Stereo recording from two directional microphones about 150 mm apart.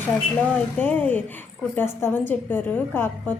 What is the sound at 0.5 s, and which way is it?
A woman's voice, 10° left (ahead or behind).